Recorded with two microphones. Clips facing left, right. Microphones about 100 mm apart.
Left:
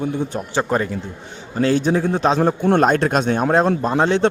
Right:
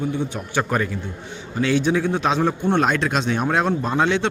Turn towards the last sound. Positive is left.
turn(degrees=40)  # may be behind; listen again after turning